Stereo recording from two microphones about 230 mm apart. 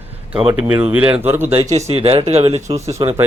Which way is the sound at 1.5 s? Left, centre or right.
Right.